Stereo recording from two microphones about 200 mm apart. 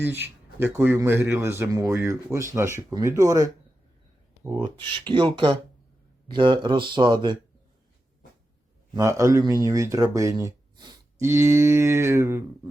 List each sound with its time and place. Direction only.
0.1 s speech: 10° right (ahead or behind)
4.5 s speech: 20° right (ahead or behind)
8.9 s speech: 15° right (ahead or behind)